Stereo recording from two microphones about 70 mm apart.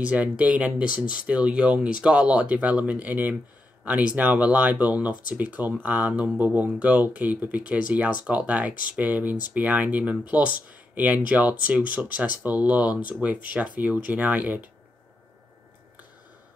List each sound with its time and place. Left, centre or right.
0.0 s speech: centre